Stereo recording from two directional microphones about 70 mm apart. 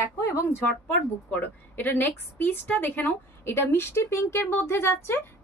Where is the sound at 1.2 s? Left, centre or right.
Left.